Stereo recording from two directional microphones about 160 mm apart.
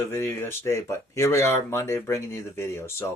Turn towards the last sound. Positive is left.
turn(degrees=15)  # may be behind; listen again after turning